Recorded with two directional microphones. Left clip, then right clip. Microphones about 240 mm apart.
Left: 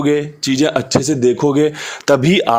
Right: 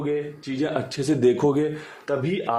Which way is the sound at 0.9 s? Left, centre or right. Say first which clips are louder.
Left 6 dB; left.